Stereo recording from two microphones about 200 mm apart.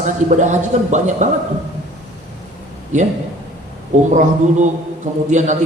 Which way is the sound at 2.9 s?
35° right (ahead or behind).